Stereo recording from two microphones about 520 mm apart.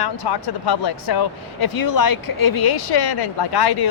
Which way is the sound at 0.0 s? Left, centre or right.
Left.